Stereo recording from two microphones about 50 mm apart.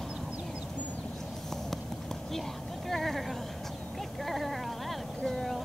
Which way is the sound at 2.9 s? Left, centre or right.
Centre.